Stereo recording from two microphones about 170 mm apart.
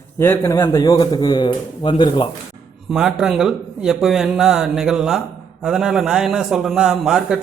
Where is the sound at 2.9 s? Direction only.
5° right (ahead or behind).